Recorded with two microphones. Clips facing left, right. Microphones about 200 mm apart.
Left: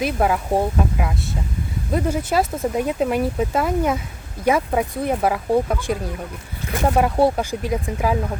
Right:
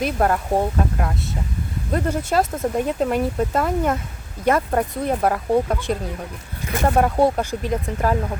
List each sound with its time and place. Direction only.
0.0 s speech: 5° left (ahead or behind)
6.8 s speech: 5° left (ahead or behind)